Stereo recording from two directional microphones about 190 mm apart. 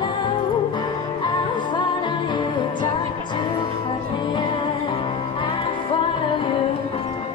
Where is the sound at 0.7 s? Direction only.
25° left (ahead or behind).